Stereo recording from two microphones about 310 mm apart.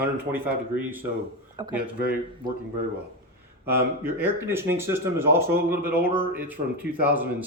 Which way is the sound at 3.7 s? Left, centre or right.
Right.